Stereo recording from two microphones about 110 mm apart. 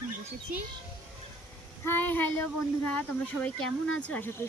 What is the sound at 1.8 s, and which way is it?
Speech, 20° left (ahead or behind).